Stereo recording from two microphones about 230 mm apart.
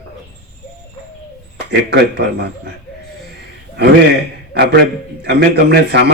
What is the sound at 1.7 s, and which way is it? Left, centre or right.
A man's voice, right.